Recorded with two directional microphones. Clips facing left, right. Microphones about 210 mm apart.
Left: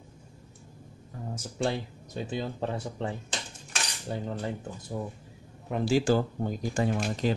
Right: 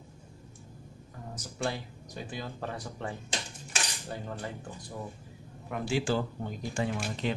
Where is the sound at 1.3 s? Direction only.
25° left (ahead or behind).